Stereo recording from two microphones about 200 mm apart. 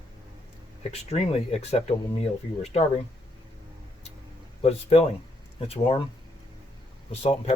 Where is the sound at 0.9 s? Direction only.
30° left (ahead or behind).